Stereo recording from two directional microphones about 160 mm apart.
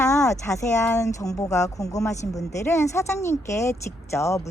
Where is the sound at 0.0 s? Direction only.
20° left (ahead or behind).